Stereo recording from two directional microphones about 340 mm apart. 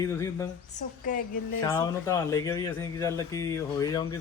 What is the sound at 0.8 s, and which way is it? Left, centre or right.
Speech, left.